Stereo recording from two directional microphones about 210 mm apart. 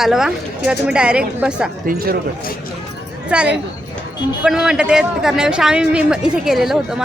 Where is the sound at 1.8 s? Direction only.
45° right (ahead or behind).